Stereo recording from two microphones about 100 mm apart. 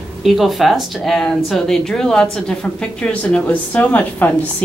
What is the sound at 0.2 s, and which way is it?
Speech, centre (ahead or behind).